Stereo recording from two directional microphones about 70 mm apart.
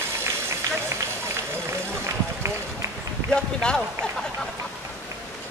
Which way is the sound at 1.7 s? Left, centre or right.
Right.